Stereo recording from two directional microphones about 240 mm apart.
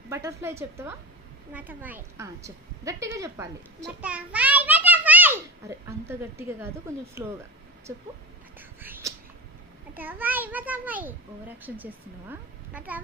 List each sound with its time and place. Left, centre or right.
0.1 s a woman's voice: centre
8.5 s whispering: centre
9.9 s a woman's voice: centre